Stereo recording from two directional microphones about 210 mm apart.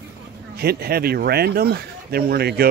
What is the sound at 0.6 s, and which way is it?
Speech, 50° right (ahead or behind).